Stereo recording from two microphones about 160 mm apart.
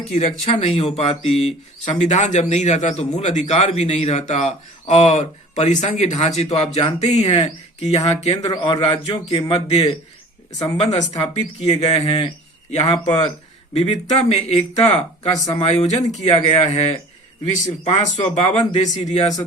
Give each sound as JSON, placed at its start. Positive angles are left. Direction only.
{"t": 0.1, "sound": "a man's voice", "side_deg": 45}
{"t": 13.7, "sound": "a man's voice", "side_deg": 45}